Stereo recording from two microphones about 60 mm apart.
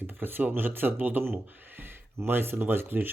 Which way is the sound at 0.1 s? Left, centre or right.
Right.